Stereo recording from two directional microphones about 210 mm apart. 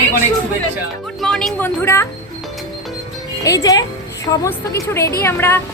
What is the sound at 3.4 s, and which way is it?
A woman's voice, 15° left (ahead or behind).